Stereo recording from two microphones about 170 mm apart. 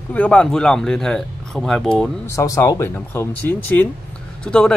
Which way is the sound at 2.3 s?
20° left (ahead or behind).